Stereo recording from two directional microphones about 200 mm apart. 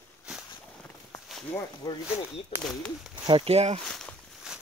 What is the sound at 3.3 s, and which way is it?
Speech, 30° right (ahead or behind).